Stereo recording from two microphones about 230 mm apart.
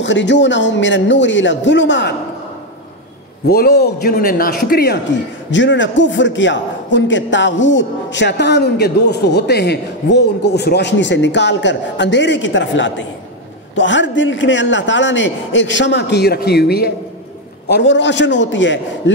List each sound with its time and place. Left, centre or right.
0.0 s a man's voice: left
3.4 s a man's voice: left
5.5 s a man's voice: left